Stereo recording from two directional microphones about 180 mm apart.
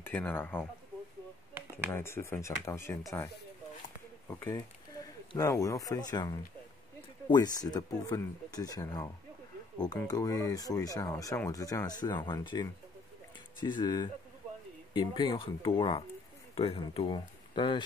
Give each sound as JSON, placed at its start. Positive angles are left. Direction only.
{"t": 0.0, "sound": "speech", "side_deg": 10}
{"t": 1.9, "sound": "speech", "side_deg": 15}
{"t": 4.3, "sound": "speech", "side_deg": 15}